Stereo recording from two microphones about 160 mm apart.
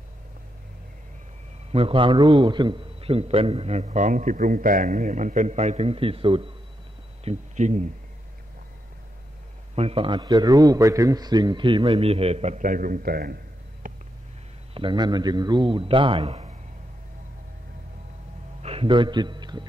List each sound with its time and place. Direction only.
1.7 s a man's voice: 35° right (ahead or behind)
7.2 s speech: 45° right (ahead or behind)
9.8 s a man's voice: 35° right (ahead or behind); by 13.4 s 70° right (ahead or behind)
14.7 s a man's voice: 30° right (ahead or behind)
18.6 s a man's voice: 35° right (ahead or behind)